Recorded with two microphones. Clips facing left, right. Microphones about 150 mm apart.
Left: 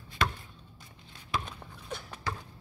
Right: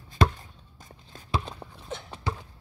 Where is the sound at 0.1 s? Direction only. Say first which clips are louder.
Right 7 dB; 40° right (ahead or behind).